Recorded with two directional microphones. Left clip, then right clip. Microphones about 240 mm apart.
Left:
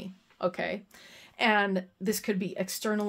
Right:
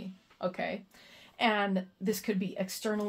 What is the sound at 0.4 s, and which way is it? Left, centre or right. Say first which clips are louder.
A woman's voice: left 4 dB; left.